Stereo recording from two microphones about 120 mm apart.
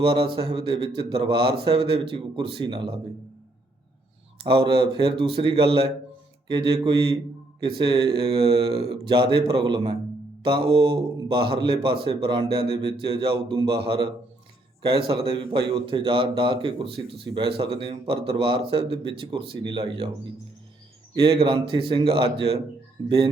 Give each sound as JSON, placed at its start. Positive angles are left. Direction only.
{"t": 0.0, "sound": "speech", "side_deg": -50}
{"t": 4.4, "sound": "speech", "side_deg": -50}